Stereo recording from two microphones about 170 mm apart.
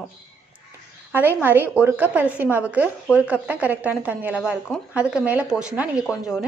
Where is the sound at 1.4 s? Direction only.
10° right (ahead or behind).